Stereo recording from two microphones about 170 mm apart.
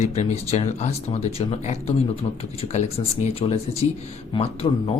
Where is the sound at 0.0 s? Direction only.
40° left (ahead or behind).